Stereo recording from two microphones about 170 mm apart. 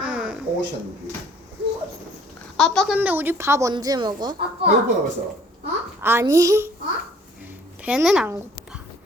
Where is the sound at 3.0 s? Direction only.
10° right (ahead or behind).